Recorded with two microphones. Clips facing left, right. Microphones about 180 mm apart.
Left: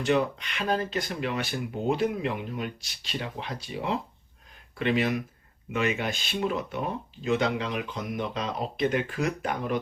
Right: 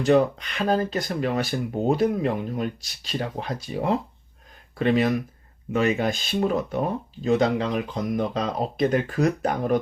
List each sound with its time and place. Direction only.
0.0 s speech: 40° right (ahead or behind)